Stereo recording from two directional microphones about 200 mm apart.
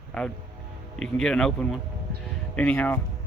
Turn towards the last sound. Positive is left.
turn(degrees=10)  # may be behind; listen again after turning